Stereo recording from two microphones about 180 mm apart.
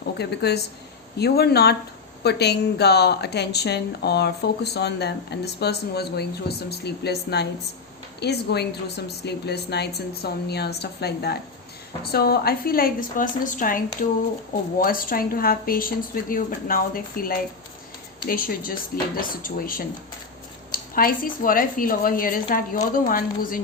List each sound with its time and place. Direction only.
0.2 s a woman's voice: 65° left (ahead or behind); by 23.6 s 50° left (ahead or behind)